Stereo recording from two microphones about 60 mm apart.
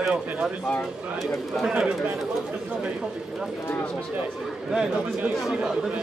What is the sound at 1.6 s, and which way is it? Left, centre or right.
Speech, centre.